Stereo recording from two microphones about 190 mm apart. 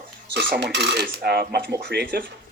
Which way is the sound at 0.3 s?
60° right (ahead or behind).